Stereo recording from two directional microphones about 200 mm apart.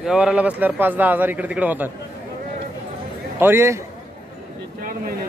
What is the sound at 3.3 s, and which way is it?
Speech, 10° right (ahead or behind).